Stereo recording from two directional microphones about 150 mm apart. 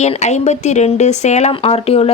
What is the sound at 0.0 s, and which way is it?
A woman's voice, 50° left (ahead or behind).